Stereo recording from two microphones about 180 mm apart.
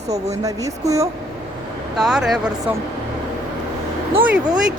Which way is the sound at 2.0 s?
5° right (ahead or behind).